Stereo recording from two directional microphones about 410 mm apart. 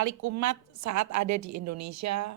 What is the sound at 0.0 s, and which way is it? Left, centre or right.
A woman's voice, right.